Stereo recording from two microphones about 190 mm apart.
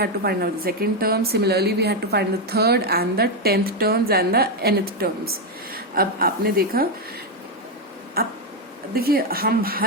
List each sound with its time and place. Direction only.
0.0 s a woman's voice: 55° right (ahead or behind)
8.2 s a woman's voice: 55° right (ahead or behind)